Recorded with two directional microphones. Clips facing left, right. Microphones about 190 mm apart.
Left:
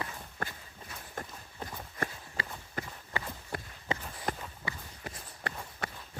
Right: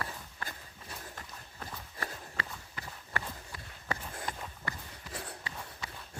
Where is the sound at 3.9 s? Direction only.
20° left (ahead or behind).